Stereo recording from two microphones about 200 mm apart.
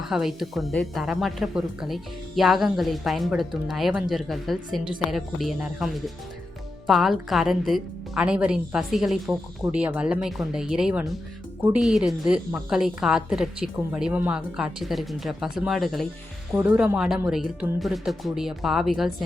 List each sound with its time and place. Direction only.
0.0 s speech: centre (ahead or behind)